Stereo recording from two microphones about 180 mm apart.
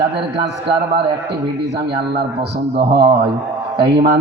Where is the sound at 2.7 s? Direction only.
65° right (ahead or behind).